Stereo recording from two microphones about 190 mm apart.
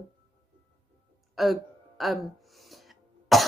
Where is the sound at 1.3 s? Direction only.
Centre (ahead or behind).